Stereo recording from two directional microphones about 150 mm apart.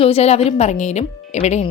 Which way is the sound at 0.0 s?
45° left (ahead or behind).